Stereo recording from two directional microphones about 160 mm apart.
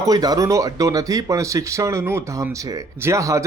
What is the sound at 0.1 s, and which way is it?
Speech, 25° right (ahead or behind).